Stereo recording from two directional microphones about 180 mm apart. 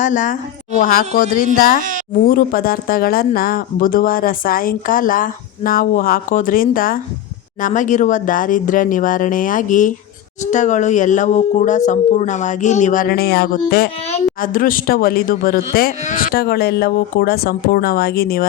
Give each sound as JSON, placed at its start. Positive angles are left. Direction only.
{"t": 0.0, "sound": "speech", "side_deg": 45}